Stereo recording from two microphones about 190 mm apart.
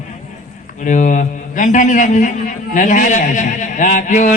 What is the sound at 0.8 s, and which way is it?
A man's voice, 40° left (ahead or behind).